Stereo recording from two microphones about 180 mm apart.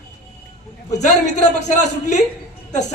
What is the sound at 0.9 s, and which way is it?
A man's voice, 40° left (ahead or behind).